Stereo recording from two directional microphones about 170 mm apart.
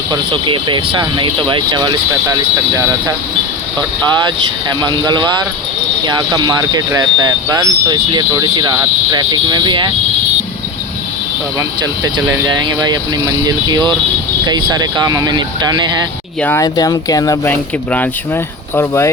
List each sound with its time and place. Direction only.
0.1 s speech: 30° right (ahead or behind)
4.8 s speech: 25° right (ahead or behind)
11.8 s speech: 25° right (ahead or behind)
16.4 s speech: 10° left (ahead or behind)
16.6 s speech: 25° left (ahead or behind)
17.5 s speech: 10° left (ahead or behind)